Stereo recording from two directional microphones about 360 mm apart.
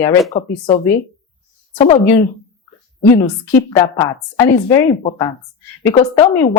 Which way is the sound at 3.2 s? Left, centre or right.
Centre.